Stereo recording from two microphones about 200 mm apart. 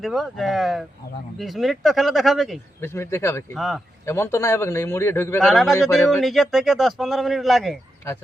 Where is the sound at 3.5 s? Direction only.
Centre (ahead or behind).